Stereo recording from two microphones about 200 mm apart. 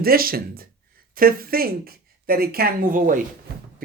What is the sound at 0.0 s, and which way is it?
Speech, 50° right (ahead or behind).